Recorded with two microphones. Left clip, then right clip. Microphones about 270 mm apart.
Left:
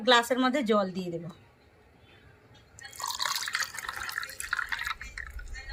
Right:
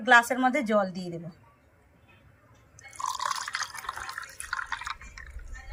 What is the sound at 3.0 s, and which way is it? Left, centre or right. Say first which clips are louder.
Water: right 1 dB; centre.